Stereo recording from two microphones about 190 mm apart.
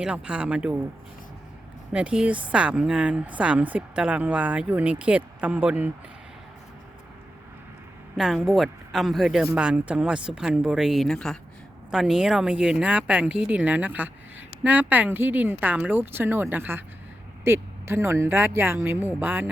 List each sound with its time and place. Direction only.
0.0 s speech: 5° right (ahead or behind)
1.9 s speech: 5° right (ahead or behind)
8.1 s a woman's voice: centre (ahead or behind)